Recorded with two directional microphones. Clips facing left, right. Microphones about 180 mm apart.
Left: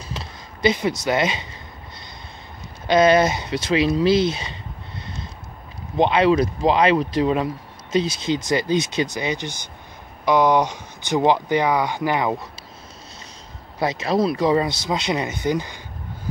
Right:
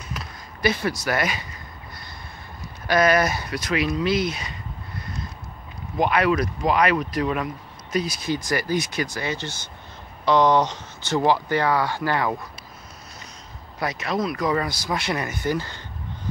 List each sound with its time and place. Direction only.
0.1 s a sound: 25° left (ahead or behind)
2.9 s speech: 25° left (ahead or behind)
13.7 s speech: 25° left (ahead or behind)